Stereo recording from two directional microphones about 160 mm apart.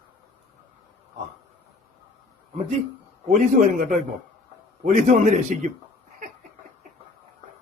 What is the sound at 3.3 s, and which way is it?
A man's voice, 55° right (ahead or behind).